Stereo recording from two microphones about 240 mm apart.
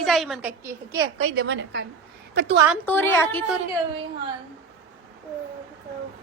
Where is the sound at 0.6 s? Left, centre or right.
Centre.